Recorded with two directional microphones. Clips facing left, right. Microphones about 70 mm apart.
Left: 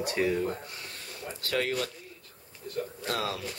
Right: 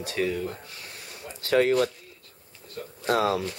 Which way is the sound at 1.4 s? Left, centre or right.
Right.